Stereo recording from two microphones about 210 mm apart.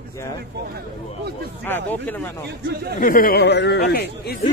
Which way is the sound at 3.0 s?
45° left (ahead or behind).